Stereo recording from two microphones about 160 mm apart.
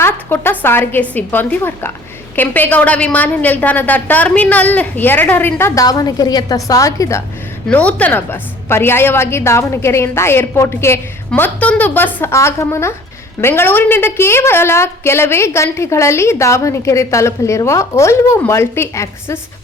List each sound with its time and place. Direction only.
0.0 s a woman's voice: 15° left (ahead or behind)
7.7 s a woman's voice: 10° left (ahead or behind)